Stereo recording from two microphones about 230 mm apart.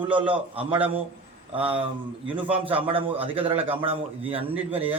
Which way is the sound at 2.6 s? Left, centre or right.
Right.